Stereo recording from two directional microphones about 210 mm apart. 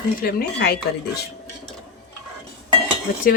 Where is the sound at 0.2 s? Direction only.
45° left (ahead or behind).